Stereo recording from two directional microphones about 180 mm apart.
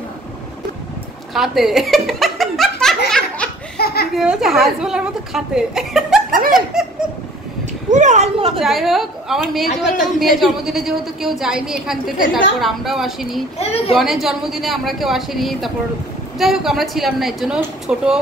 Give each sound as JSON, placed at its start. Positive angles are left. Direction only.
{"t": 1.3, "sound": "snicker", "side_deg": 0}
{"t": 3.7, "sound": "laughter", "side_deg": 60}
{"t": 4.1, "sound": "a woman's voice", "side_deg": -5}
{"t": 6.3, "sound": "laughter", "side_deg": -50}
{"t": 7.9, "sound": "speech", "side_deg": -40}
{"t": 8.5, "sound": "a woman's voice", "side_deg": 0}
{"t": 9.7, "sound": "a man's voice", "side_deg": 40}
{"t": 10.1, "sound": "a woman's voice", "side_deg": 0}
{"t": 13.6, "sound": "a man's voice", "side_deg": 35}
{"t": 13.9, "sound": "a woman's voice", "side_deg": 0}